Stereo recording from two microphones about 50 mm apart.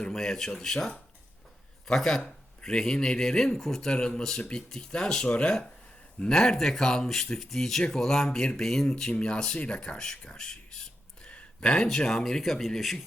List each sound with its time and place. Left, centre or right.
0.1 s speech: centre